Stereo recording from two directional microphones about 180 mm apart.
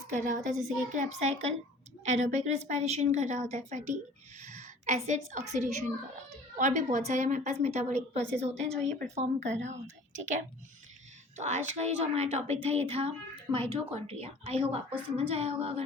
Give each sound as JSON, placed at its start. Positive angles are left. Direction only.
{"t": 0.1, "sound": "a woman's voice", "side_deg": -45}
{"t": 11.3, "sound": "a woman's voice", "side_deg": -40}